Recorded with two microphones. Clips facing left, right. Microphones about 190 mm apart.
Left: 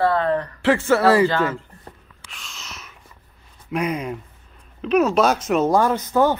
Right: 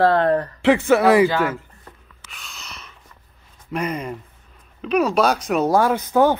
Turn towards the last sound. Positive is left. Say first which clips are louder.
# right 1 dB
turn(degrees=-15)  # may be behind; listen again after turning